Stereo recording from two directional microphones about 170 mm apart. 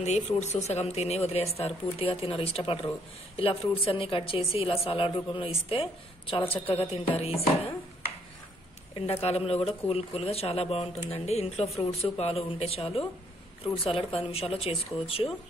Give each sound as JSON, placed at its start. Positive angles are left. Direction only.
{"t": 0.0, "sound": "speech", "side_deg": 40}
{"t": 8.9, "sound": "speech", "side_deg": 35}